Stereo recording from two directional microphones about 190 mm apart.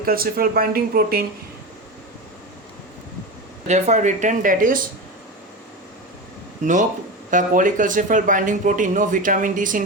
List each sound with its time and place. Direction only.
0.0 s speech: 50° right (ahead or behind)
3.7 s speech: 40° right (ahead or behind)
6.6 s speech: 40° right (ahead or behind)